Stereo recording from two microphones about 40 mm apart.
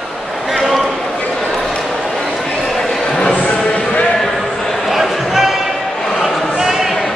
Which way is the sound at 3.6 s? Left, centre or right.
Left.